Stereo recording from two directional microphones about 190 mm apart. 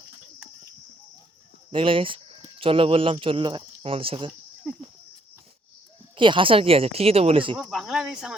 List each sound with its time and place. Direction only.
1.7 s speech: 30° right (ahead or behind)
6.1 s speech: 25° right (ahead or behind)
7.5 s speech: centre (ahead or behind)